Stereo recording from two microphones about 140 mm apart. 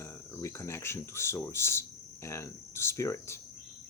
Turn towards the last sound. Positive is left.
turn(degrees=20)  # may be behind; listen again after turning